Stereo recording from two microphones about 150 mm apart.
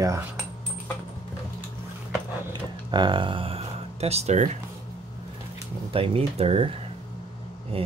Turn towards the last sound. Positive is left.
turn(degrees=-40)  # may be behind; listen again after turning